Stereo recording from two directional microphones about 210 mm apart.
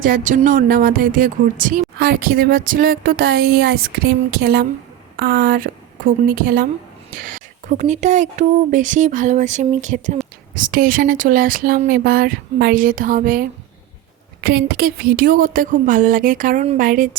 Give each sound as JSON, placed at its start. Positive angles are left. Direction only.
{"t": 0.0, "sound": "a woman's voice", "side_deg": -40}